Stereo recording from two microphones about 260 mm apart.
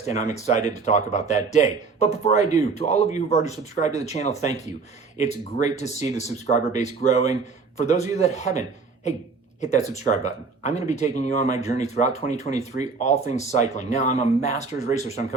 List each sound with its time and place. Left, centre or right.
0.0 s speech: left